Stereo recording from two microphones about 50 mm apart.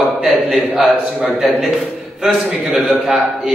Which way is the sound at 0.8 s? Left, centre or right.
Centre.